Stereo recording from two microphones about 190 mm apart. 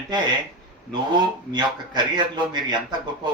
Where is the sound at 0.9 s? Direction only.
25° right (ahead or behind).